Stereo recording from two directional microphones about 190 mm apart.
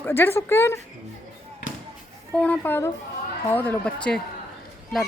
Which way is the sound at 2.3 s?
5° left (ahead or behind).